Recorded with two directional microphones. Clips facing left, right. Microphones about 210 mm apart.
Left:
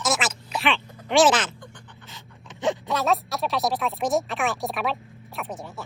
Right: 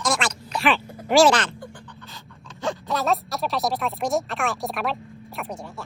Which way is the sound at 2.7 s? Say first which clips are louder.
Left 1 dB; centre (ahead or behind).